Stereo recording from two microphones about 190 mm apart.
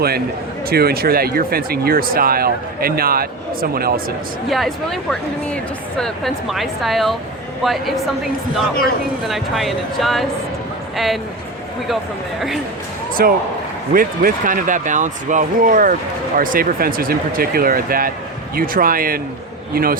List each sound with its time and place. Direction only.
0.7 s speech: 55° right (ahead or behind)
4.4 s speech: centre (ahead or behind)
6.0 s speech: centre (ahead or behind)
13.2 s speech: 50° right (ahead or behind)